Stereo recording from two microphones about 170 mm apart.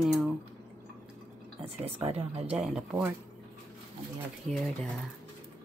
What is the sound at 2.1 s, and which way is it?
Speech, 35° right (ahead or behind).